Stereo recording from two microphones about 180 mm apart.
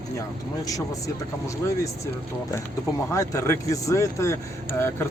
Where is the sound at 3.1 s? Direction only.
15° left (ahead or behind).